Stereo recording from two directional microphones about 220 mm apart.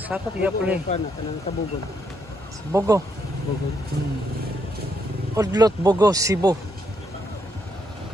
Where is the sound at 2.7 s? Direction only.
15° right (ahead or behind).